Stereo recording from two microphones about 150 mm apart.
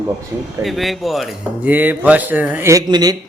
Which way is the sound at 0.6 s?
Centre (ahead or behind).